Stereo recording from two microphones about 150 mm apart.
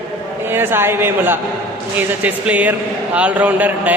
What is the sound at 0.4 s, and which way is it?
Speech, 15° right (ahead or behind).